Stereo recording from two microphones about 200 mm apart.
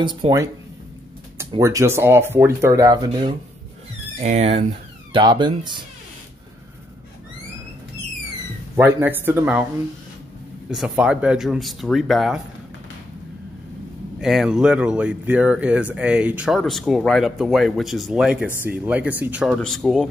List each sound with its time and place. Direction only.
0.0 s speech: 20° right (ahead or behind)
1.5 s speech: 15° right (ahead or behind)
4.2 s speech: 35° right (ahead or behind)
8.7 s speech: 10° right (ahead or behind)
10.7 s speech: 5° right (ahead or behind)
14.2 s speech: centre (ahead or behind)